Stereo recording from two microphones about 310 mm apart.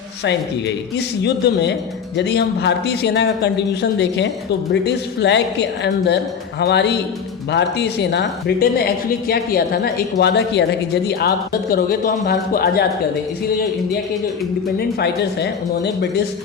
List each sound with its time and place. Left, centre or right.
0.9 s a woman's voice: left
14.8 s a woman's voice: left